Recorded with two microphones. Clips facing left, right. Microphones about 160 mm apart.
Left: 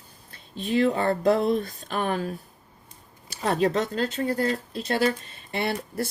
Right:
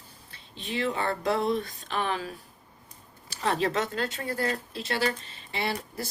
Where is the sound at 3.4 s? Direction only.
40° left (ahead or behind).